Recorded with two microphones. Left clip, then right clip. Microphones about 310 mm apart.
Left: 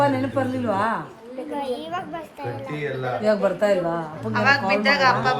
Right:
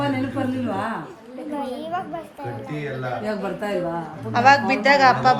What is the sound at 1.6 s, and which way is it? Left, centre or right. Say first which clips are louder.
Speech: right 1 dB; centre.